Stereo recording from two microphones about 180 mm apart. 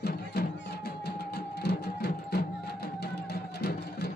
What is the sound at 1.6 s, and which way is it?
Music, 65° left (ahead or behind).